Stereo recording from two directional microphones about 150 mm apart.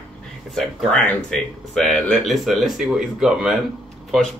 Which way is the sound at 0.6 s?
5° left (ahead or behind).